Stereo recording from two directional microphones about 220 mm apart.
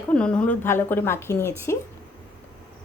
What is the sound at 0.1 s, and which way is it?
Speech, 5° left (ahead or behind).